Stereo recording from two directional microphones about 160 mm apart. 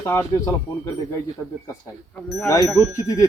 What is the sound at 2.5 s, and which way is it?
Speech, 20° left (ahead or behind).